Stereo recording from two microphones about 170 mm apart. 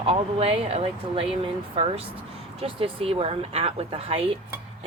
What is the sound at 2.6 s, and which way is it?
Speech, 35° right (ahead or behind).